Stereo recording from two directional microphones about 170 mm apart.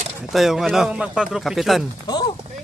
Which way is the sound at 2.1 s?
20° left (ahead or behind).